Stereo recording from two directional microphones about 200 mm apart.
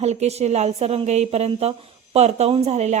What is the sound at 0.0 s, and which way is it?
A woman's voice, 35° right (ahead or behind).